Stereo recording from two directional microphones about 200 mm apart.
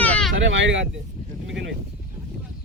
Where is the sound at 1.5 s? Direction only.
65° right (ahead or behind).